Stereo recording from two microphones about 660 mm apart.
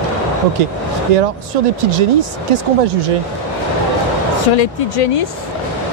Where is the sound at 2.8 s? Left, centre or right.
Right.